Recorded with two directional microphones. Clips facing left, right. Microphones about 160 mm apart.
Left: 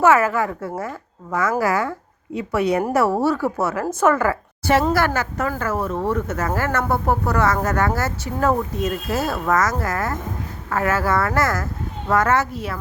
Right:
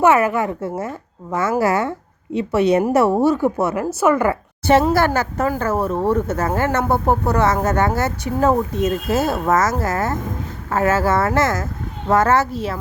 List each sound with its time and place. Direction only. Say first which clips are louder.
0.0 s speech: right 1 dB; 20° right (ahead or behind)